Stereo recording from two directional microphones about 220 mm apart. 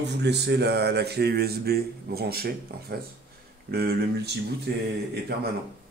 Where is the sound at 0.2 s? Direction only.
50° right (ahead or behind).